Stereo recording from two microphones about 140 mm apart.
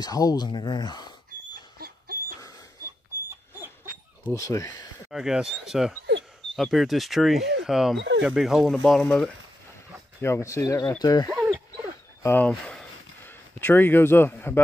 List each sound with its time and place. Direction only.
0.0 s speech: 25° left (ahead or behind)
1.8 s dog: 90° right
4.2 s speech: 20° left (ahead or behind)
5.1 s speech: 5° right (ahead or behind)
10.2 s speech: 20° left (ahead or behind)
12.2 s a sound: 15° left (ahead or behind)